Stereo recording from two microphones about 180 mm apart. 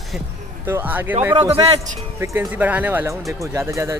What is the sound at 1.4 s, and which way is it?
Speech, 30° right (ahead or behind).